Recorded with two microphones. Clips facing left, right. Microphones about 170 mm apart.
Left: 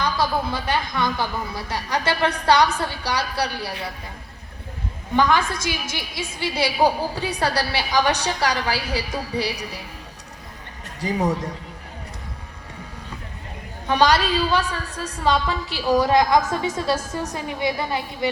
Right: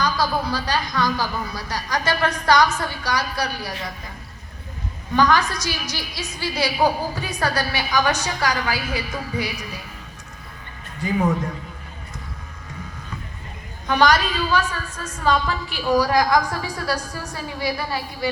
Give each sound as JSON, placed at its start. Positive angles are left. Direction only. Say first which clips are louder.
{"t": 0.0, "sound": "a woman's voice", "louder": "even", "side_deg": 25}
{"t": 5.1, "sound": "a woman's voice", "louder": "right 1 dB", "side_deg": 25}
{"t": 11.0, "sound": "a woman's voice", "louder": "right 1 dB", "side_deg": 35}
{"t": 13.8, "sound": "a woman's voice", "louder": "even", "side_deg": 30}